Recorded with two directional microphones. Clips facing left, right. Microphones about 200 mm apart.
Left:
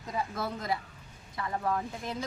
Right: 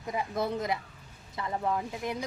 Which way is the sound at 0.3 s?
20° right (ahead or behind).